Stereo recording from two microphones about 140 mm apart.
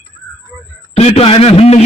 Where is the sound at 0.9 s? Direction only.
40° left (ahead or behind).